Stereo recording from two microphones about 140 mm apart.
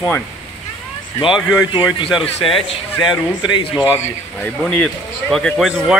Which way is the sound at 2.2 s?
40° left (ahead or behind).